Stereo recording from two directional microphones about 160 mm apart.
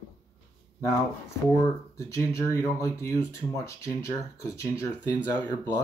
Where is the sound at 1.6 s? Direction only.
20° left (ahead or behind).